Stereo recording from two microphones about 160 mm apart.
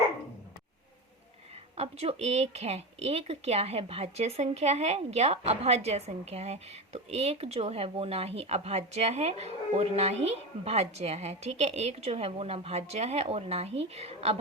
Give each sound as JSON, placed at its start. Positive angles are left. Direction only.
{"t": 1.7, "sound": "speech", "side_deg": -40}